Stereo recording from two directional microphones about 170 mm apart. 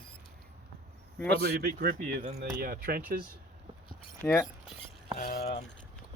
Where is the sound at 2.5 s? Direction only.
60° right (ahead or behind).